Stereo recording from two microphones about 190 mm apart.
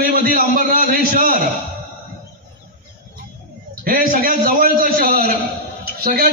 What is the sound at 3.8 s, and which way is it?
A man's voice, 45° right (ahead or behind).